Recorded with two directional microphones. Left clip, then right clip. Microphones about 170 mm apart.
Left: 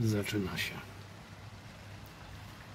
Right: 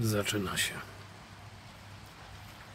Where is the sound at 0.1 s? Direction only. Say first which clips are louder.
Right 3 dB; 20° right (ahead or behind).